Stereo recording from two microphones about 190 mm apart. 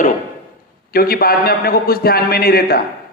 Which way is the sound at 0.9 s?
50° left (ahead or behind).